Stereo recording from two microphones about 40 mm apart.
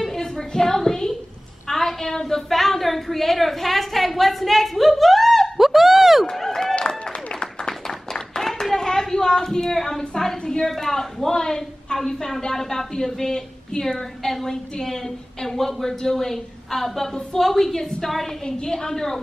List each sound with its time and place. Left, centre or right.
0.0 s a sound: centre
1.7 s a woman's voice: centre
5.6 s a sound: centre
6.3 s run: centre
7.1 s applause: centre
8.4 s a sound: centre
10.6 s a woman's voice: centre
14.2 s a woman's voice: centre
18.4 s a woman's voice: centre